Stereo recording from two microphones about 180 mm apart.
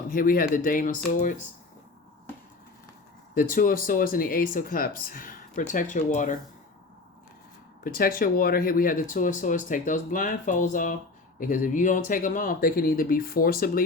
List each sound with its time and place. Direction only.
0.1 s speech: 55° left (ahead or behind)
3.3 s speech: 50° left (ahead or behind)
7.9 s speech: 55° left (ahead or behind)